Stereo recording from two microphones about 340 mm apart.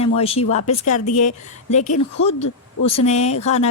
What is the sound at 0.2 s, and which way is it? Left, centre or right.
Speech, centre.